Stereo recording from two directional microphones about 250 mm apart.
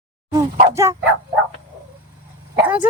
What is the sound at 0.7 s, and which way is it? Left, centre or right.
Speech, centre.